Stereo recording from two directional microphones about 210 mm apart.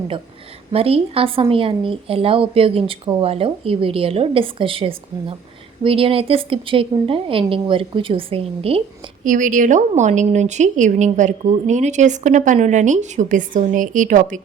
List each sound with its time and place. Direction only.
0.7 s a woman's voice: 25° right (ahead or behind)
9.2 s a woman's voice: 40° right (ahead or behind)